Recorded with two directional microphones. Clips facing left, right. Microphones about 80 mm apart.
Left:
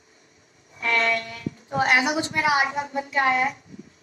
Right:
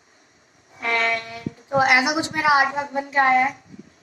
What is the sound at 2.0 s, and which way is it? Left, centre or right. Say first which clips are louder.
Speech: right 3 dB; right.